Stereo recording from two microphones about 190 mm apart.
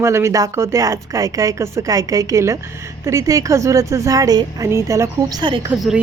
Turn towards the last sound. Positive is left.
turn(degrees=-5)  # may be behind; listen again after turning